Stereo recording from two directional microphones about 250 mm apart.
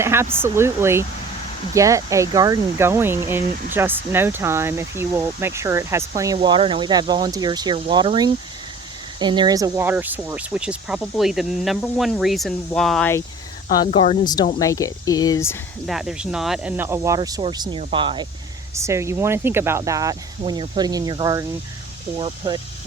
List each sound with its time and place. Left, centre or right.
0.0 s speech: centre
13.7 s speech: left
15.9 s speech: centre